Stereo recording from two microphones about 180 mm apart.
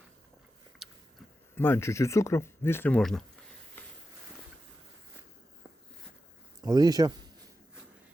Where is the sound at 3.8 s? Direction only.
10° left (ahead or behind).